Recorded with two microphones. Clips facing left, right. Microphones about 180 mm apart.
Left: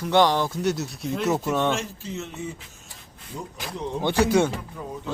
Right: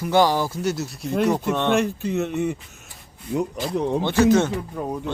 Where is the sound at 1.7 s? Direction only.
60° right (ahead or behind).